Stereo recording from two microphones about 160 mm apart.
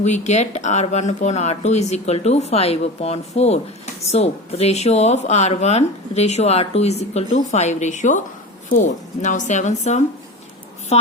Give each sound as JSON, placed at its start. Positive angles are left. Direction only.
{"t": 0.0, "sound": "speech", "side_deg": 45}